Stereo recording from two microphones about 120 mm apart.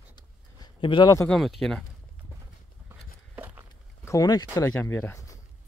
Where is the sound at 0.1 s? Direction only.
40° left (ahead or behind).